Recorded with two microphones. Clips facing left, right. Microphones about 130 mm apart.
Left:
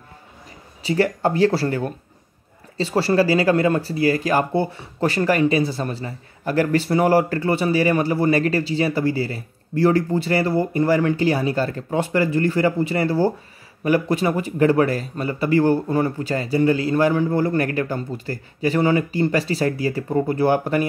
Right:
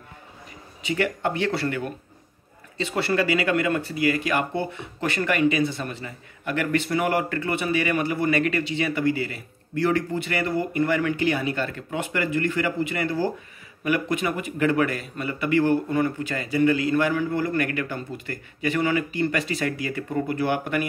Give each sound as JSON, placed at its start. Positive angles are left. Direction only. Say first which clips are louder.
{"t": 0.8, "sound": "speech", "louder": "left 5 dB", "side_deg": 35}